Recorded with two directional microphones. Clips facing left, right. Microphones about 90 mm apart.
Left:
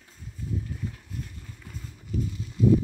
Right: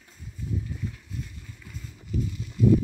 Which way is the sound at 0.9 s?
45° left (ahead or behind).